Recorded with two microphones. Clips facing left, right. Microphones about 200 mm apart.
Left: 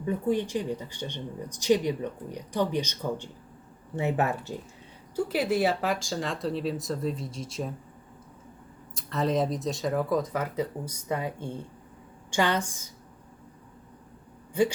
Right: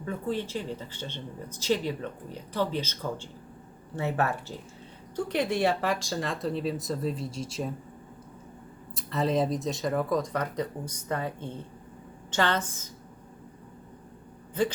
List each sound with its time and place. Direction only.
0.0 s speech: 15° left (ahead or behind)
5.1 s speech: 5° left (ahead or behind)
9.0 s speech: centre (ahead or behind)